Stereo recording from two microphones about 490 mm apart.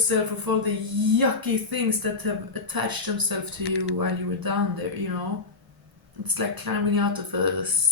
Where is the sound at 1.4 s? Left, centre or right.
Right.